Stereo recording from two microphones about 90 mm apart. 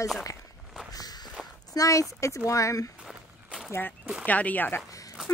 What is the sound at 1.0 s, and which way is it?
Walk, 45° left (ahead or behind).